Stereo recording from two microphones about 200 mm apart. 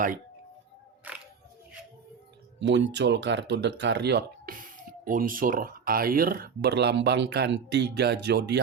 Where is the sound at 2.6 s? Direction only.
65° right (ahead or behind).